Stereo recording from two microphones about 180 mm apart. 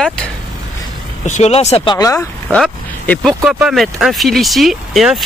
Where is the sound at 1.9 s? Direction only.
20° left (ahead or behind).